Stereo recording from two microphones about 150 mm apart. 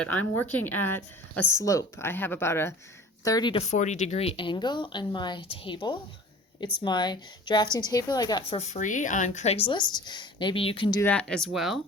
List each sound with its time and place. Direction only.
0.0 s a woman's voice: 10° left (ahead or behind)
3.5 s a woman's voice: 45° left (ahead or behind); by 8.5 s 30° left (ahead or behind)
8.5 s speech: 50° left (ahead or behind); by 11.0 s 35° left (ahead or behind)
11.0 s speech: 5° left (ahead or behind)